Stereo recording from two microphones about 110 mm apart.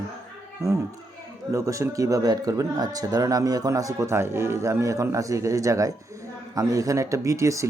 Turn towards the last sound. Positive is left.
turn(degrees=-30)  # may be behind; listen again after turning